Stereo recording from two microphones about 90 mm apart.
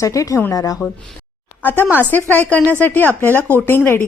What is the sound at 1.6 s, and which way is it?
A woman's voice, 20° left (ahead or behind).